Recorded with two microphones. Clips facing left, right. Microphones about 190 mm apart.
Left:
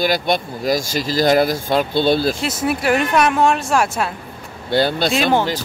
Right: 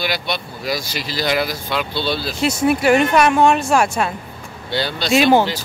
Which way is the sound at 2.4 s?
Centre (ahead or behind).